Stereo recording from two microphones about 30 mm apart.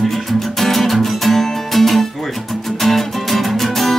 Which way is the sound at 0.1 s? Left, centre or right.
Centre.